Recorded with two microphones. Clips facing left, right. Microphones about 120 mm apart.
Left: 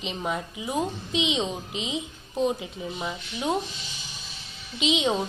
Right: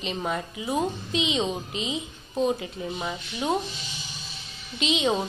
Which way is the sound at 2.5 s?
Centre (ahead or behind).